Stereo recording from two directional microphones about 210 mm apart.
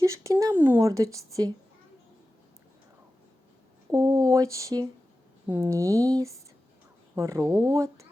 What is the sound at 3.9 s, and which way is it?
Speech, 15° right (ahead or behind).